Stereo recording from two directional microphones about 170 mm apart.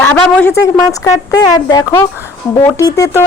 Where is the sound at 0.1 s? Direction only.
10° left (ahead or behind).